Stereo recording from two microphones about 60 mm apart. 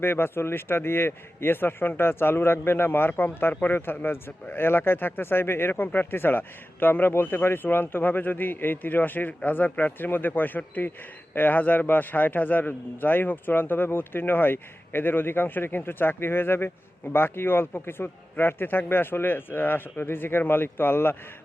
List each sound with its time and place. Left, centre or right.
0.0 s a man's voice: left